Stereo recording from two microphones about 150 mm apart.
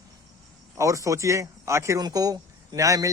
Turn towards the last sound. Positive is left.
turn(degrees=-20)  # may be behind; listen again after turning